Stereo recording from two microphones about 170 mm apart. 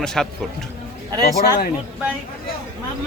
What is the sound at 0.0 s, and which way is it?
Speech, 5° left (ahead or behind).